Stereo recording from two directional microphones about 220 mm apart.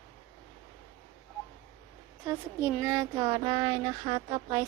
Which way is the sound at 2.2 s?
10° right (ahead or behind).